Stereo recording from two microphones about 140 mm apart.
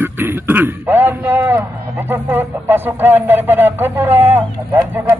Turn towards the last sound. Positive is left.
turn(degrees=-15)  # may be behind; listen again after turning